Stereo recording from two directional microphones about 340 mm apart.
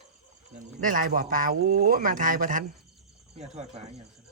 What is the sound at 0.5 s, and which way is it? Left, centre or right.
Speech, right.